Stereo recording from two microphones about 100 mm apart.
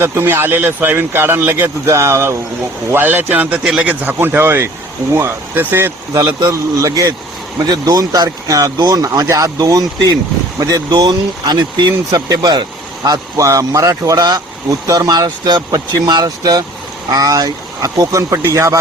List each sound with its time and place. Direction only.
0.0 s speech: 20° right (ahead or behind)
6.4 s speech: 35° right (ahead or behind)
13.1 s speech: 35° right (ahead or behind)